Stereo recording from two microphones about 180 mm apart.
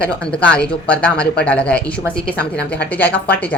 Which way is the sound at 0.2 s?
5° left (ahead or behind).